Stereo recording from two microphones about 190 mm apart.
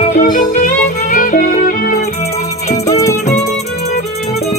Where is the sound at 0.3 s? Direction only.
45° left (ahead or behind).